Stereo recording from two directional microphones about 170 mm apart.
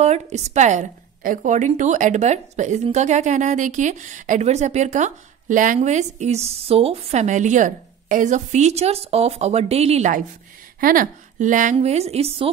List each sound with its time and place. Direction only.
0.0 s a woman's voice: 40° right (ahead or behind)
10.8 s a woman's voice: 55° right (ahead or behind)
11.7 s a woman's voice: 40° right (ahead or behind)